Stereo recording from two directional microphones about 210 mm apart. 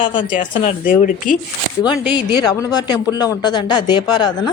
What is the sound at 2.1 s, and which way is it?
Speech, 20° left (ahead or behind).